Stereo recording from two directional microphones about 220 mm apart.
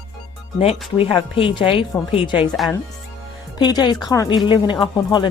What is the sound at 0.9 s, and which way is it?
Speech, 25° left (ahead or behind).